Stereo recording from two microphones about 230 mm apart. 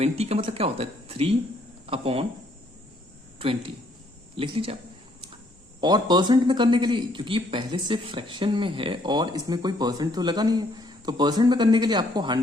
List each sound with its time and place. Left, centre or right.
0.0 s speech: right
3.3 s speech: right
5.8 s speech: centre